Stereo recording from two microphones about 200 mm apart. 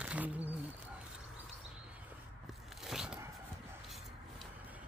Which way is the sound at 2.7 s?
Centre (ahead or behind).